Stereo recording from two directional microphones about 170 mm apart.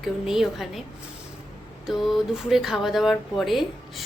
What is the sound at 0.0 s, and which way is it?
Speech, centre (ahead or behind).